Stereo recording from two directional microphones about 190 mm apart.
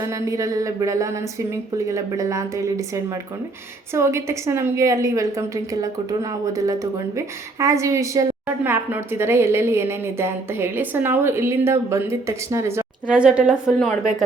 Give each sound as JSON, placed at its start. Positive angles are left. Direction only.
{"t": 0.0, "sound": "a woman's voice", "side_deg": -15}